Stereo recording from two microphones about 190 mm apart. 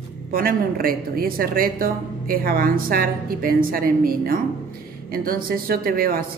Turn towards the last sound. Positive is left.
turn(degrees=-50)  # may be behind; listen again after turning